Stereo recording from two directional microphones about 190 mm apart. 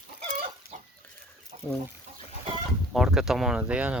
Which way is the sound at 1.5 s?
40° right (ahead or behind).